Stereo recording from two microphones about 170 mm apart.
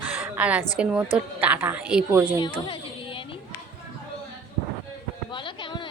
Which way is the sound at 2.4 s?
30° left (ahead or behind).